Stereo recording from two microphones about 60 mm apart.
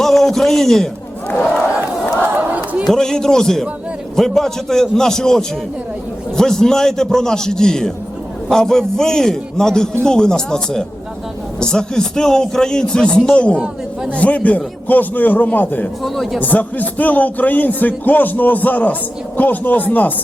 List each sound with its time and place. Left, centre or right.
0.0 s a sound: centre
2.2 s crowd: right
2.9 s a man's voice: centre; by 15.9 s left
16.0 s speech: centre
16.4 s a man's voice: left